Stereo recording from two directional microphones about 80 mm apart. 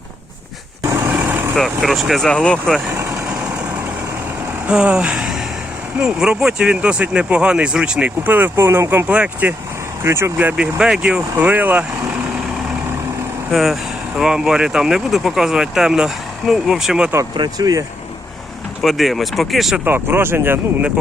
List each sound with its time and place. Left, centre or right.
1.1 s vehicle: right
1.5 s speech: centre
2.3 s speech: centre
4.6 s speech: centre
8.3 s speech: right
10.0 s speech: right
10.3 s speech: centre
13.5 s speech: centre
17.3 s speech: right
18.8 s speech: centre
19.8 s speech: right